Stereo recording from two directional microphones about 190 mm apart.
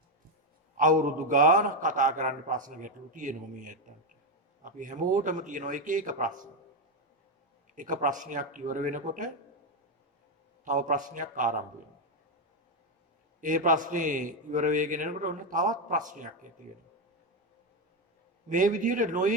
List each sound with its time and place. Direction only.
0.8 s a man's voice: 45° right (ahead or behind)
7.8 s a man's voice: 45° right (ahead or behind)
10.7 s a man's voice: 45° right (ahead or behind)
13.4 s a man's voice: 45° right (ahead or behind)
18.4 s a man's voice: 40° right (ahead or behind)